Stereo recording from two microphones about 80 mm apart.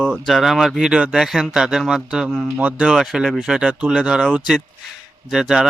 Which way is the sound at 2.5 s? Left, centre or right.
Centre.